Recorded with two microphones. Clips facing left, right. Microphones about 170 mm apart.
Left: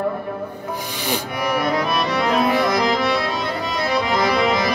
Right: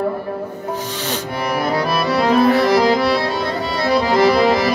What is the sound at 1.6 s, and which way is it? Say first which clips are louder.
Music: right 3 dB; 30° right (ahead or behind).